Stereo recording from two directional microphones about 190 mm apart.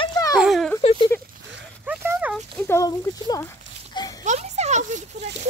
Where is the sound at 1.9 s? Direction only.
5° right (ahead or behind).